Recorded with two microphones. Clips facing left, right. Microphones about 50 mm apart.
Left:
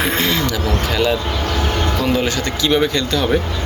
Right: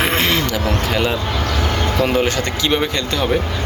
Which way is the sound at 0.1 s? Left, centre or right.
Right.